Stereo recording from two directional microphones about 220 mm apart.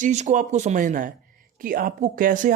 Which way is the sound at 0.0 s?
30° right (ahead or behind).